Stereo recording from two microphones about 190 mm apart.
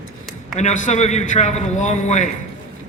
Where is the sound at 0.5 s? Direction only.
40° left (ahead or behind).